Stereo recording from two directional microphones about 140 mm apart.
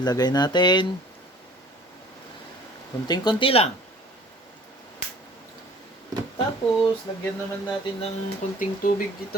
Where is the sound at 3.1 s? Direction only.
30° left (ahead or behind).